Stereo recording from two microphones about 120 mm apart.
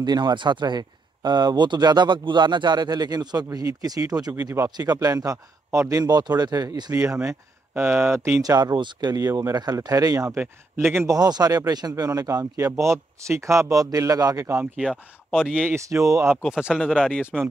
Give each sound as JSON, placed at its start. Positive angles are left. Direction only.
{"t": 0.0, "sound": "speech", "side_deg": -35}
{"t": 10.3, "sound": "speech", "side_deg": -15}
{"t": 11.1, "sound": "speech", "side_deg": -35}
{"t": 14.8, "sound": "speech", "side_deg": -5}
{"t": 15.7, "sound": "speech", "side_deg": -25}
{"t": 16.4, "sound": "speech", "side_deg": -5}